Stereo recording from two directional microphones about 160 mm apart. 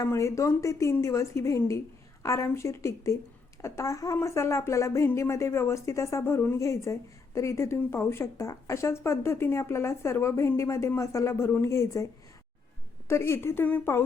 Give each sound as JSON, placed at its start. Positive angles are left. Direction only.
{"t": 0.0, "sound": "a woman's voice", "side_deg": 20}
{"t": 13.1, "sound": "speech", "side_deg": 15}